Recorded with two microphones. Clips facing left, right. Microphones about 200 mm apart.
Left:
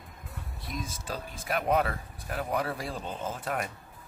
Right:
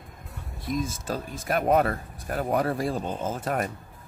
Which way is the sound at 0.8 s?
45° right (ahead or behind).